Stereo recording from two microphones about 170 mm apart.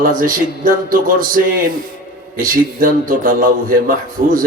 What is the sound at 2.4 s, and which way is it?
Speech, 55° right (ahead or behind).